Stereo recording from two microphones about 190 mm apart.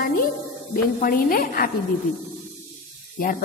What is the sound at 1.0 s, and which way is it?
Speech, 45° left (ahead or behind).